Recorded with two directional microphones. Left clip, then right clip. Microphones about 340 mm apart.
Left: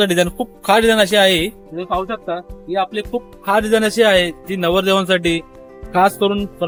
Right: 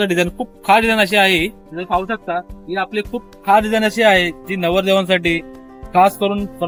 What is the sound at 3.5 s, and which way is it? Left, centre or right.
A man's voice, centre.